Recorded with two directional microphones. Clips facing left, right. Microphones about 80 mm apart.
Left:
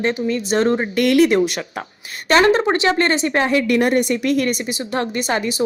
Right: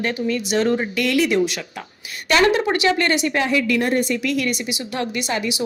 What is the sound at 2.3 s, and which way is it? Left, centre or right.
A woman's voice, left.